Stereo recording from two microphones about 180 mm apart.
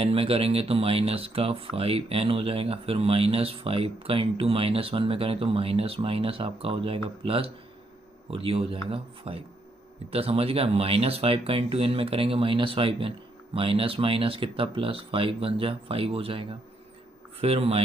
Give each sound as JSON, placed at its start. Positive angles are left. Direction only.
{"t": 0.0, "sound": "speech", "side_deg": -30}